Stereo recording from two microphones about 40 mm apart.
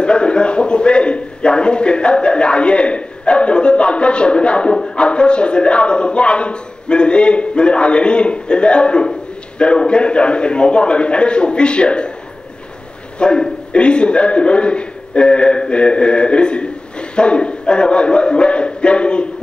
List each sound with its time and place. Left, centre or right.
0.0 s a man's voice: left
13.2 s a man's voice: left